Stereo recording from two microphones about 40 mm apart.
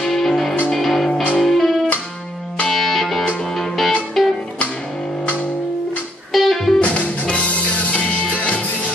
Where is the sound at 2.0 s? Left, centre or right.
Left.